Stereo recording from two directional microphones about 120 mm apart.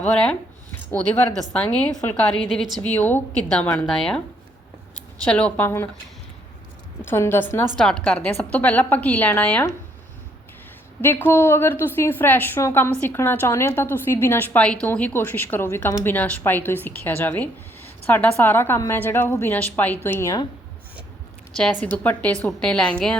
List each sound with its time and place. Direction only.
0.0 s a woman's voice: 5° left (ahead or behind)
1.5 s a woman's voice: 10° left (ahead or behind)
5.2 s a woman's voice: 10° left (ahead or behind)
5.6 s speech: 20° left (ahead or behind)
7.0 s a woman's voice: 20° left (ahead or behind)
7.8 s a woman's voice: 5° left (ahead or behind)
11.0 s a woman's voice: 20° left (ahead or behind)
21.5 s a woman's voice: 10° left (ahead or behind)